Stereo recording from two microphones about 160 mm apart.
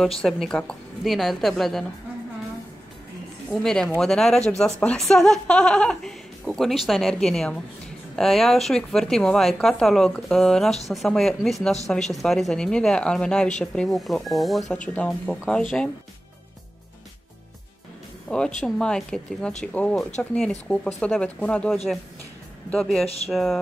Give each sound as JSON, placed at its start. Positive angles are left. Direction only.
{"t": 0.2, "sound": "speech", "side_deg": 5}
{"t": 3.4, "sound": "speech", "side_deg": 5}
{"t": 18.6, "sound": "speech", "side_deg": 5}
{"t": 23.0, "sound": "speech", "side_deg": 40}
{"t": 23.3, "sound": "speech", "side_deg": 0}